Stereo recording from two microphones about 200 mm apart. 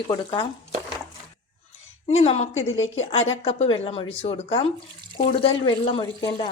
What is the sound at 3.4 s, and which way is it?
A woman's voice, 30° left (ahead or behind).